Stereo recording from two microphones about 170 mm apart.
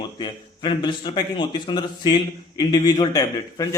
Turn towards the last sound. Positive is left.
turn(degrees=20)  # may be behind; listen again after turning